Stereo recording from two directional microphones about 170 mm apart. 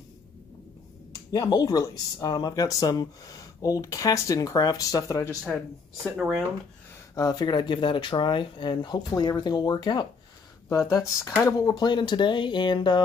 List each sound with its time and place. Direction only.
1.3 s speech: 20° left (ahead or behind)
6.1 s speech: 5° right (ahead or behind)
7.2 s speech: 25° left (ahead or behind)